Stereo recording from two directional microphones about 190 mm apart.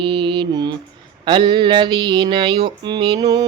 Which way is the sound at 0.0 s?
25° right (ahead or behind).